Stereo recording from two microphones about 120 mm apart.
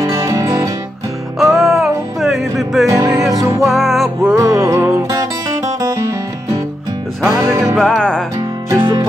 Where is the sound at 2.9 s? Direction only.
25° right (ahead or behind).